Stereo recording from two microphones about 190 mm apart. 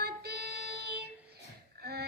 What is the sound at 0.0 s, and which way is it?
Child singing, 55° right (ahead or behind).